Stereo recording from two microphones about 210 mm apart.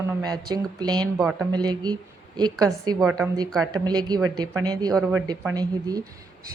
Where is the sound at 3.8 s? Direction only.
20° right (ahead or behind).